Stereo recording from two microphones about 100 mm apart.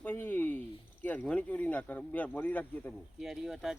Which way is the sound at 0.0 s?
20° left (ahead or behind).